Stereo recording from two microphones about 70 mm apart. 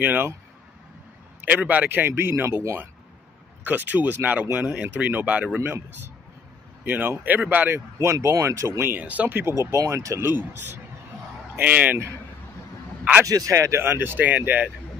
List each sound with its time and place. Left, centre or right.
0.0 s speech: right
1.4 s speech: right
3.6 s speech: right
5.6 s speech: right
8.8 s speech: right
9.5 s speech: right
11.5 s speech: right
13.2 s speech: right
13.8 s speech: right